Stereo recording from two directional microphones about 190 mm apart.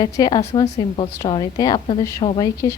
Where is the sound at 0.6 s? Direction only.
35° left (ahead or behind).